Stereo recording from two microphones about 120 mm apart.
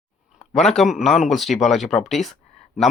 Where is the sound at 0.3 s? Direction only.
5° left (ahead or behind).